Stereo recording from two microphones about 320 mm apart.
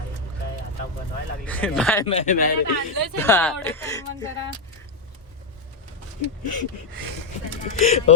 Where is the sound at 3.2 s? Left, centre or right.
Centre.